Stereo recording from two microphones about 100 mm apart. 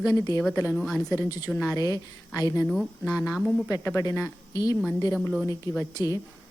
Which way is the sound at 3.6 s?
25° left (ahead or behind).